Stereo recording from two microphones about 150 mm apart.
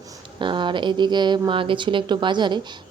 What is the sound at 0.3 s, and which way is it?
Speech, 30° right (ahead or behind).